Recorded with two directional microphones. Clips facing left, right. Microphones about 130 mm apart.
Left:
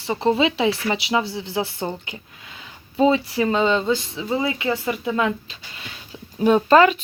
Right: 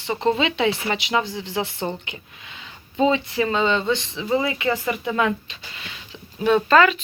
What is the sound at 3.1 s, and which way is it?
Speech, 35° left (ahead or behind).